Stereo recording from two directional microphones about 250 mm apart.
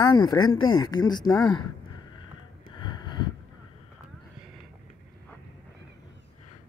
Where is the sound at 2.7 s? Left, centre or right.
Centre.